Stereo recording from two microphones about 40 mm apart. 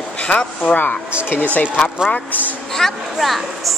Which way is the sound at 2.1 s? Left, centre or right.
Left.